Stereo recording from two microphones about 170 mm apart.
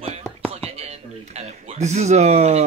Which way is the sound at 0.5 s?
35° right (ahead or behind).